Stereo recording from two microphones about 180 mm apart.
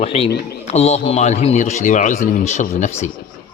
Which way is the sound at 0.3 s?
60° left (ahead or behind).